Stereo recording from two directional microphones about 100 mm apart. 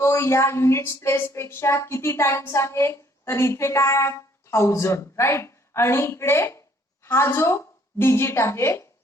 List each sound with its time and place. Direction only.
0.0 s a woman's voice: 30° left (ahead or behind)